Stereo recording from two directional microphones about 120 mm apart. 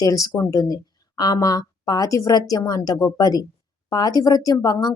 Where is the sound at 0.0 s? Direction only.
30° left (ahead or behind).